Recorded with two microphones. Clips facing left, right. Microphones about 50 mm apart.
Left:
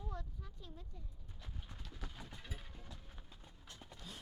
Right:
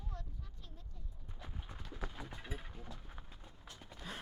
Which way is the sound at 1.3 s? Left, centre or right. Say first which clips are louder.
Right 4 dB; centre.